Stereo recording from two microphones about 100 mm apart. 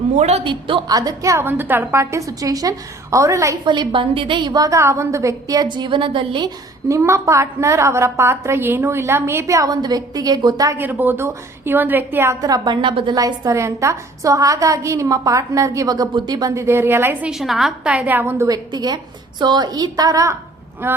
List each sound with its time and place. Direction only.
0.4 s a woman's voice: 55° right (ahead or behind)
0.9 s a woman's voice: 35° right (ahead or behind)
3.7 s a woman's voice: 55° right (ahead or behind); by 5.6 s 35° right (ahead or behind)
5.7 s a woman's voice: 55° right (ahead or behind)
6.8 s a woman's voice: 30° right (ahead or behind)
10.8 s a woman's voice: 20° right (ahead or behind)
12.4 s a woman's voice: 40° right (ahead or behind)
13.1 s a woman's voice: 35° right (ahead or behind)
16.6 s a woman's voice: 25° right (ahead or behind)
17.2 s a woman's voice: 5° right (ahead or behind); by 18.4 s 20° right (ahead or behind)
18.4 s a woman's voice: 40° right (ahead or behind)
20.8 s a woman's voice: 25° right (ahead or behind)